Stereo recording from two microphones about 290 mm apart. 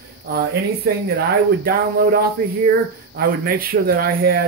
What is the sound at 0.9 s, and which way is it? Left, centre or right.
Speech, right.